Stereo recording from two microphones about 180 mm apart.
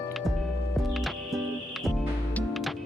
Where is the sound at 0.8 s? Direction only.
Centre (ahead or behind).